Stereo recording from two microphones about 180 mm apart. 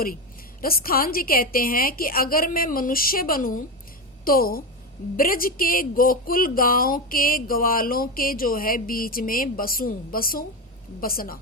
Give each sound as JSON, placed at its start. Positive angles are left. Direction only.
{"t": 0.6, "sound": "a woman's voice", "side_deg": 55}